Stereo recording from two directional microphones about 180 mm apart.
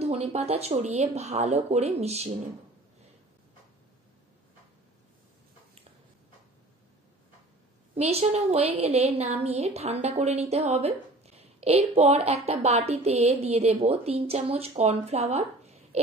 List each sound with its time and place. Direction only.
0.0 s a woman's voice: 35° right (ahead or behind)
7.9 s a woman's voice: 35° right (ahead or behind)